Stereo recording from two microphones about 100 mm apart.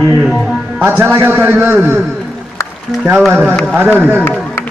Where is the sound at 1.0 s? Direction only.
25° right (ahead or behind).